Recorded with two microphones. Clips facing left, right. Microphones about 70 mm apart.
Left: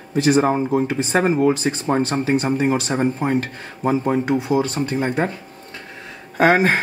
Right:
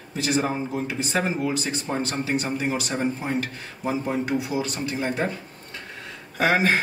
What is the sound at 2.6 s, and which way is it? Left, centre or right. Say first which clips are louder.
Speech: left 6 dB; left.